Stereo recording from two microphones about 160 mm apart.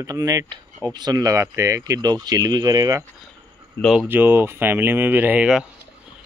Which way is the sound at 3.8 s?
5° left (ahead or behind).